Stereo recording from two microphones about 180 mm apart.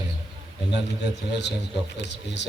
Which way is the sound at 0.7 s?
70° left (ahead or behind).